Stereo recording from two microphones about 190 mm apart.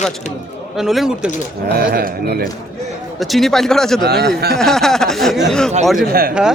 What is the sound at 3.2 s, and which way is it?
Speech, centre (ahead or behind).